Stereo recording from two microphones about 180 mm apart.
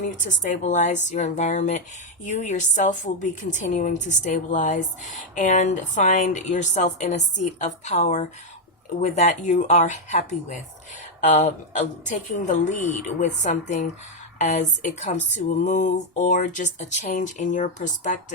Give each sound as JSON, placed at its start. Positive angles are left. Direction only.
{"t": 0.0, "sound": "speech", "side_deg": 45}